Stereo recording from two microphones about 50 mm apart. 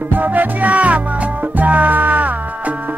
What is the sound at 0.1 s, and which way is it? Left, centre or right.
Music, right.